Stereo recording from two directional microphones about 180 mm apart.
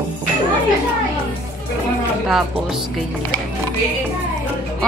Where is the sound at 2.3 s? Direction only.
Centre (ahead or behind).